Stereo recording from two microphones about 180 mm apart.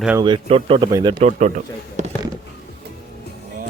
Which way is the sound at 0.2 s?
25° right (ahead or behind).